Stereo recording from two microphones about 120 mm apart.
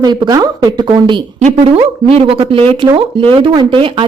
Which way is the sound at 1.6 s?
55° right (ahead or behind).